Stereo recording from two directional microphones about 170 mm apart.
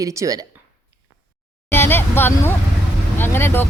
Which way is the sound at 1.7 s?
15° left (ahead or behind).